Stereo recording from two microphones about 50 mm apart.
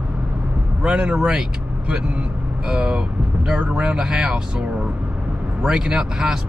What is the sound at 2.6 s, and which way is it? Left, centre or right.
Speech, centre.